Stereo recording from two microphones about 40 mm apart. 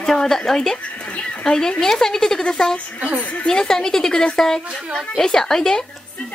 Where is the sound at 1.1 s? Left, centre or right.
Left.